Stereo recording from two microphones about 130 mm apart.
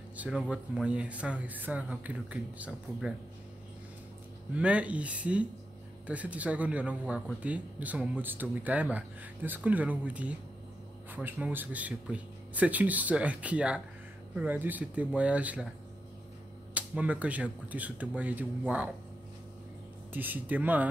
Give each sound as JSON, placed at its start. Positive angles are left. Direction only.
{"t": 0.2, "sound": "speech", "side_deg": -10}
{"t": 4.6, "sound": "speech", "side_deg": -10}
{"t": 16.7, "sound": "speech", "side_deg": -10}
{"t": 20.1, "sound": "speech", "side_deg": -15}